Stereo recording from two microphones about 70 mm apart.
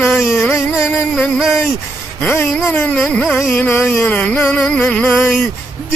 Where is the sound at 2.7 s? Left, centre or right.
Centre.